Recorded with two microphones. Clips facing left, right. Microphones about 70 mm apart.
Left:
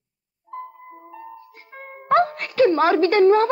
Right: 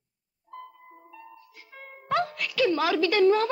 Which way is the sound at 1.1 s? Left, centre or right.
Left.